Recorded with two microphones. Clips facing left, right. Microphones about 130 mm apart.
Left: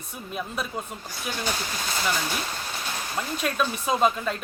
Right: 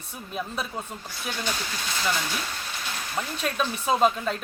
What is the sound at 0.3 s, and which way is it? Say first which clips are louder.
Speech: even; centre (ahead or behind).